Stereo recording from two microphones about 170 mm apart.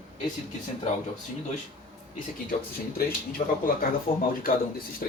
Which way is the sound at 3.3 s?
55° left (ahead or behind).